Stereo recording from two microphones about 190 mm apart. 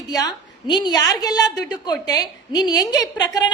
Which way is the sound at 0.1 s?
20° left (ahead or behind).